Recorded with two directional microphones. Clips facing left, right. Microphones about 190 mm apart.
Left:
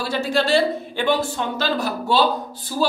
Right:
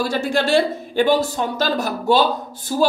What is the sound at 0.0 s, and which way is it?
Speech, 50° right (ahead or behind).